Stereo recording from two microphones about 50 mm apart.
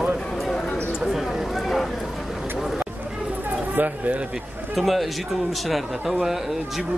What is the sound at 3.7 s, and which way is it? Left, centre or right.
Speech, right.